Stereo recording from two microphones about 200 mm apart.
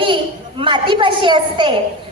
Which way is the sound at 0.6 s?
25° right (ahead or behind).